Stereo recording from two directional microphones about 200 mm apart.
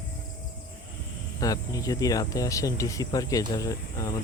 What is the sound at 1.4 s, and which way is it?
Speech, 15° left (ahead or behind).